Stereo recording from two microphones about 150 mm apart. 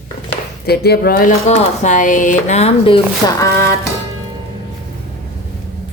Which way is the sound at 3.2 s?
20° left (ahead or behind).